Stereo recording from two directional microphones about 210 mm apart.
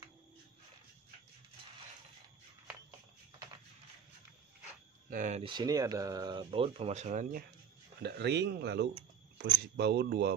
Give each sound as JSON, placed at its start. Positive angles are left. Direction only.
{"t": 5.1, "sound": "speech", "side_deg": -40}
{"t": 5.4, "sound": "speech", "side_deg": -20}
{"t": 8.0, "sound": "speech", "side_deg": -55}